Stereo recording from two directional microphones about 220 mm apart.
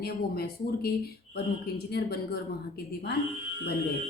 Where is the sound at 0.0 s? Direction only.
45° left (ahead or behind).